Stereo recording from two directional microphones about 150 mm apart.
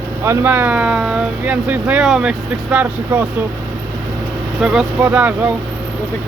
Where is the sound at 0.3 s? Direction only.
15° right (ahead or behind).